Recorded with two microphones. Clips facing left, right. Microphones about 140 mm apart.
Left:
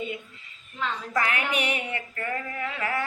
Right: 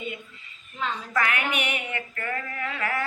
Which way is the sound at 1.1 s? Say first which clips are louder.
Even; 30° left (ahead or behind).